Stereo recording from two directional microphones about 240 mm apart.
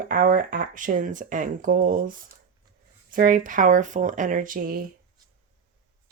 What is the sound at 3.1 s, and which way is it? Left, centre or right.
Speech, right.